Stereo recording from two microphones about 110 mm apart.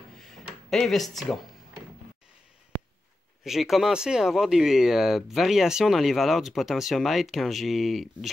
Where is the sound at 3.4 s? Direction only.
Centre (ahead or behind).